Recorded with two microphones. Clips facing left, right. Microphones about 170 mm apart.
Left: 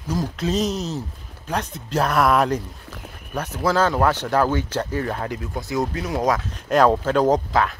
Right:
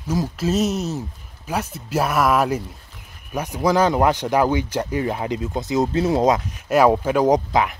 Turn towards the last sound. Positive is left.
turn(degrees=-15)  # may be behind; listen again after turning